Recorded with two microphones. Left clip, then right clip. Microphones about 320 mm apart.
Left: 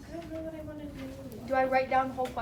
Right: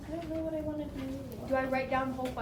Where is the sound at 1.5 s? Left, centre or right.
Left.